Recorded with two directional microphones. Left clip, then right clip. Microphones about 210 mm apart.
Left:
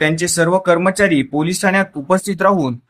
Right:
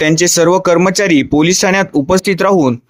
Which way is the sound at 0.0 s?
40° right (ahead or behind).